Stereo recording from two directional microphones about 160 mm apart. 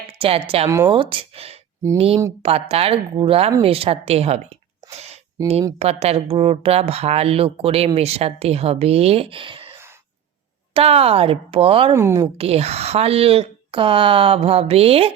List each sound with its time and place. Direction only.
0.1 s a woman's voice: 40° right (ahead or behind)
10.8 s speech: 40° right (ahead or behind)
11.9 s speech: 15° right (ahead or behind)
12.4 s speech: 40° right (ahead or behind)